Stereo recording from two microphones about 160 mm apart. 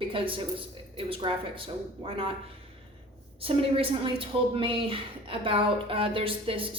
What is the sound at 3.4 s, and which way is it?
A woman's voice, 35° right (ahead or behind).